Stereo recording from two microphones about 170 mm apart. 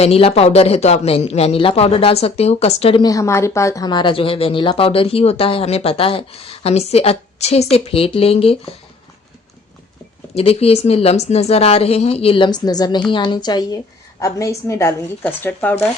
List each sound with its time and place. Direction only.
0.0 s speech: 35° left (ahead or behind)
3.0 s speech: 20° left (ahead or behind); by 8.7 s 35° left (ahead or behind)
10.3 s a woman's voice: 35° left (ahead or behind); by 15.8 s 10° left (ahead or behind)